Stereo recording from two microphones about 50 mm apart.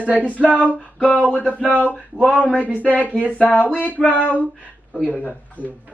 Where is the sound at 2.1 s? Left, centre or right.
Right.